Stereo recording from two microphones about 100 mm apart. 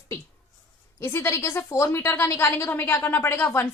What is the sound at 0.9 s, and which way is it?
A woman's voice, 25° left (ahead or behind).